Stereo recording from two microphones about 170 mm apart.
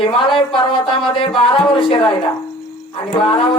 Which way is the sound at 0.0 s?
30° left (ahead or behind).